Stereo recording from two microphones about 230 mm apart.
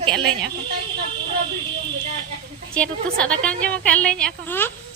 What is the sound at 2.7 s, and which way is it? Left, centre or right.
A woman's voice, centre.